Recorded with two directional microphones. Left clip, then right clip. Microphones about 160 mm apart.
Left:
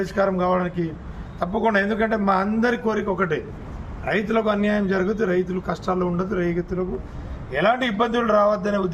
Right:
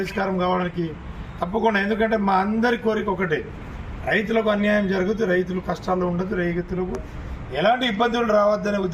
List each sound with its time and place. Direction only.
0.0 s a man's voice: 10° left (ahead or behind)
7.5 s a man's voice: 10° left (ahead or behind)